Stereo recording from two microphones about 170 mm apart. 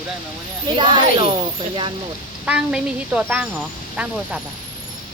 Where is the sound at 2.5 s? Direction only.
5° right (ahead or behind).